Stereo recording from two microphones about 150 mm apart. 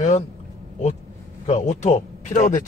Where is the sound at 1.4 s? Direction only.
50° left (ahead or behind).